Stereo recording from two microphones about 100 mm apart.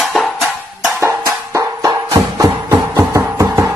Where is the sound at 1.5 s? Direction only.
35° right (ahead or behind).